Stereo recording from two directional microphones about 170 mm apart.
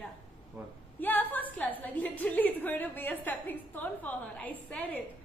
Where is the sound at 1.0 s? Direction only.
10° left (ahead or behind).